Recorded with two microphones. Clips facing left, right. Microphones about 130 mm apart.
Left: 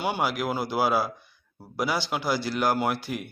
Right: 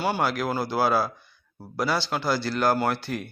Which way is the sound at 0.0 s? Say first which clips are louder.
Right 2 dB; 15° left (ahead or behind).